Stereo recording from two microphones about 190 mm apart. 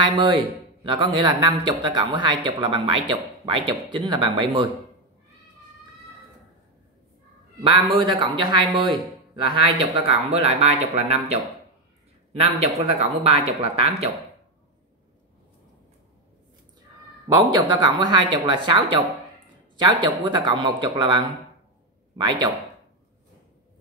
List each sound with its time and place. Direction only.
0.0 s a man's voice: 25° right (ahead or behind)
7.6 s speech: 25° right (ahead or behind)
17.3 s speech: 20° right (ahead or behind)